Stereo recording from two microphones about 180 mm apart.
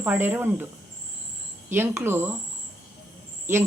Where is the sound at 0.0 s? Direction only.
10° right (ahead or behind).